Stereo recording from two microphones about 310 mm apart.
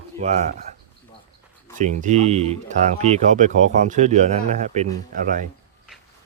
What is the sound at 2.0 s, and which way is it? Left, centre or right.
Speech, right.